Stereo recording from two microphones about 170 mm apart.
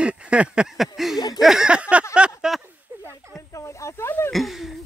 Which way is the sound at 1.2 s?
20° left (ahead or behind).